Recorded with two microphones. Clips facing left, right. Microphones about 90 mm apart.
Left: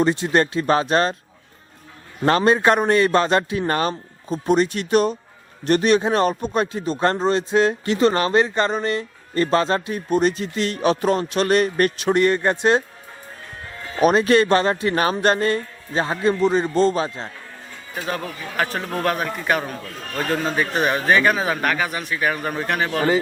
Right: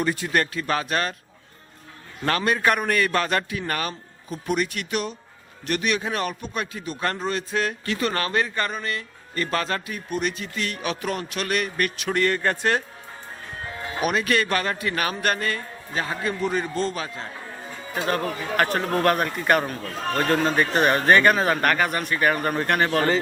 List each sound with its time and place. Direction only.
0.0 s speech: 25° left (ahead or behind)
2.2 s speech: 25° left (ahead or behind)
12.1 s speech: 20° left (ahead or behind)
14.0 s speech: 30° left (ahead or behind)
18.5 s speech: centre (ahead or behind)